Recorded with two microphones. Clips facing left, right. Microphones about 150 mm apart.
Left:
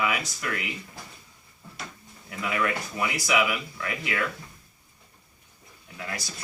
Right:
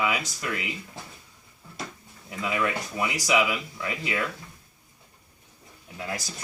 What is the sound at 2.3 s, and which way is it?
Speech, 15° right (ahead or behind).